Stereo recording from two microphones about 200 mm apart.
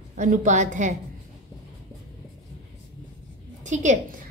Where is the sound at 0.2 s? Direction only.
40° right (ahead or behind).